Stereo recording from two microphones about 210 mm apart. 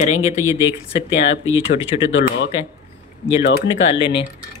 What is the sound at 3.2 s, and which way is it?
Speech, 55° left (ahead or behind).